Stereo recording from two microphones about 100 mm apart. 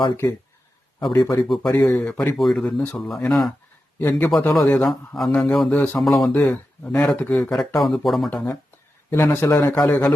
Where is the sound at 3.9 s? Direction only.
20° left (ahead or behind).